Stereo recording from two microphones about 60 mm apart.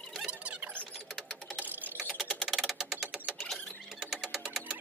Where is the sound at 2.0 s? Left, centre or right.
Centre.